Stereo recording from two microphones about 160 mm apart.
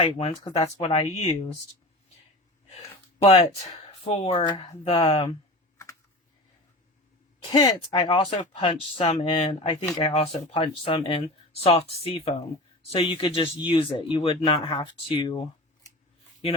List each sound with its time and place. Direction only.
0.1 s speech: 35° left (ahead or behind)
2.6 s a sound: 40° left (ahead or behind)
4.0 s speech: 45° left (ahead or behind)
7.5 s speech: 25° left (ahead or behind)